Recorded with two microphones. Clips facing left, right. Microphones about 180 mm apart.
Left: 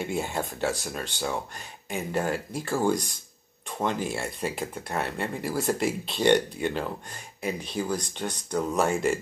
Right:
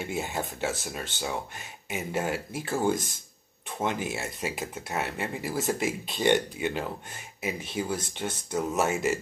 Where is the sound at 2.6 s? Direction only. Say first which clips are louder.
Left 2 dB; 20° right (ahead or behind).